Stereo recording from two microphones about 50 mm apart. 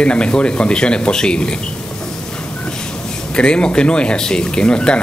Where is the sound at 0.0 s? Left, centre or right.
Centre.